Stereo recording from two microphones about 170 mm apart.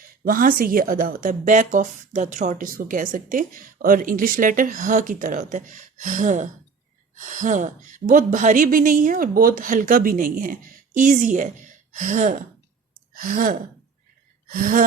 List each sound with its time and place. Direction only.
0.3 s a woman's voice: 55° right (ahead or behind)